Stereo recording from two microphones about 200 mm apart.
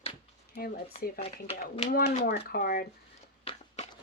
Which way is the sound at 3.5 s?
30° left (ahead or behind).